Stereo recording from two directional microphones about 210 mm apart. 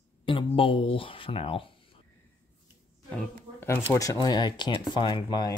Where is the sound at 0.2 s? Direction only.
25° left (ahead or behind).